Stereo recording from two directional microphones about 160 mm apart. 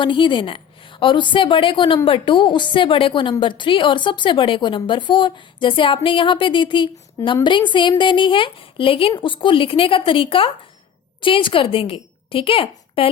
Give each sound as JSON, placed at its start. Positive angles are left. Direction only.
{"t": 0.0, "sound": "a woman's voice", "side_deg": 30}